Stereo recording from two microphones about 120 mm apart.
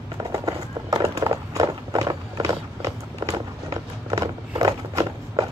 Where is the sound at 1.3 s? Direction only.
30° right (ahead or behind).